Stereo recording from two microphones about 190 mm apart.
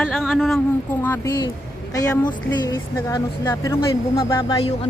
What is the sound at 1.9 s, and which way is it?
Speech, 20° left (ahead or behind).